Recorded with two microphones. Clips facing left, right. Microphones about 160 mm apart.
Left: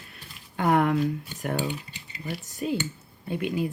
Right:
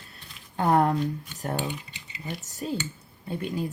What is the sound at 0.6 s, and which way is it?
Speech, 35° right (ahead or behind).